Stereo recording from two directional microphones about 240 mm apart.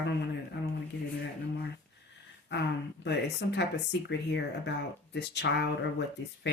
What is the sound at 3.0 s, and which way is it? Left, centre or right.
Speech, left.